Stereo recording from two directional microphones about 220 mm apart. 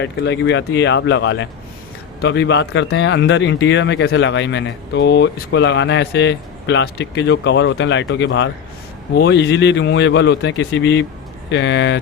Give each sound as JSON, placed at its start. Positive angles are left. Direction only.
{"t": 0.0, "sound": "speech", "side_deg": 55}